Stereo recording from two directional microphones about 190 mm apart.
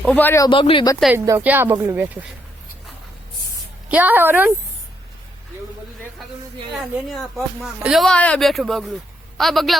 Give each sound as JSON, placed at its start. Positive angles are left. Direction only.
{"t": 0.0, "sound": "speech", "side_deg": 5}
{"t": 0.5, "sound": "speech", "side_deg": 25}
{"t": 1.1, "sound": "speech", "side_deg": -15}
{"t": 3.8, "sound": "speech", "side_deg": -10}
{"t": 7.1, "sound": "speech", "side_deg": -5}